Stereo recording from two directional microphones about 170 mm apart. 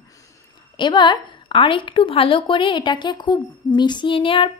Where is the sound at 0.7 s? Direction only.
25° left (ahead or behind).